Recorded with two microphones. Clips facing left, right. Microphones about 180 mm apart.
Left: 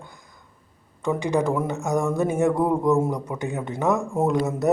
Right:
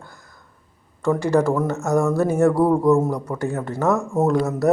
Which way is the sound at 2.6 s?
5° right (ahead or behind).